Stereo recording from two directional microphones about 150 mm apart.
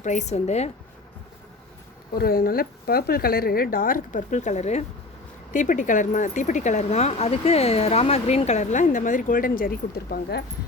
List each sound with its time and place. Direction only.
0.0 s a woman's voice: 55° left (ahead or behind)
2.1 s a woman's voice: 85° left; by 4.9 s 50° left (ahead or behind)
5.5 s speech: 60° left (ahead or behind); by 10.4 s 90° left